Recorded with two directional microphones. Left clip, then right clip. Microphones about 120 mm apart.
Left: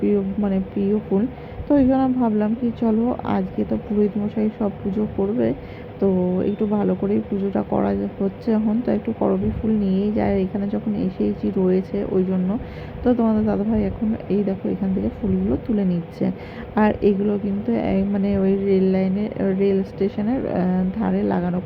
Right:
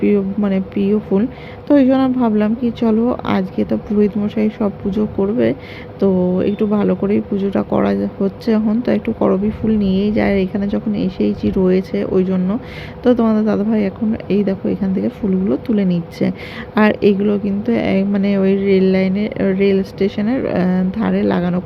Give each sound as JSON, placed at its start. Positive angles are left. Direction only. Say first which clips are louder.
{"t": 0.0, "sound": "a woman's voice", "louder": "right 5 dB", "side_deg": -30}